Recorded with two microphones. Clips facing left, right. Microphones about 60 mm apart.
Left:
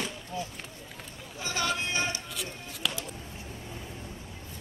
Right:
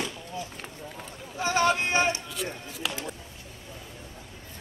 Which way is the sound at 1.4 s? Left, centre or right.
Right.